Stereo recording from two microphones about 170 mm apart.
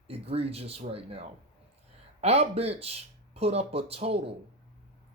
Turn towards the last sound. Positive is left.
turn(degrees=-35)  # may be behind; listen again after turning